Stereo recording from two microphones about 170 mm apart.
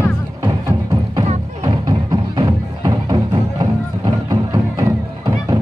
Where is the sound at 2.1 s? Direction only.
25° right (ahead or behind).